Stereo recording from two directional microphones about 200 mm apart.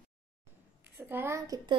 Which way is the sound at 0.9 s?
10° right (ahead or behind).